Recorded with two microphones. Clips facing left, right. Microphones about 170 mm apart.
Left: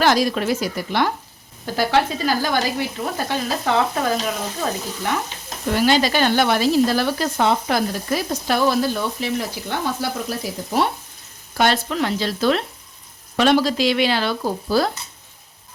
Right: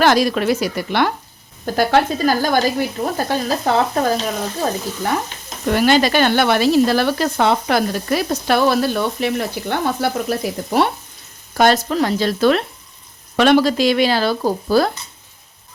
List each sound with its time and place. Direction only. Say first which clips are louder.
0.0 s speech: right 3 dB; 65° right (ahead or behind)
1.6 s frying: right 3 dB; 50° right (ahead or behind)
5.7 s speech: right 3 dB; 55° right (ahead or behind)
11.5 s speech: right 5 dB; 45° right (ahead or behind)
12.4 s frying: right 3 dB; 60° right (ahead or behind); by 14.5 s 40° right (ahead or behind)
14.7 s frying: right 4 dB; 50° right (ahead or behind)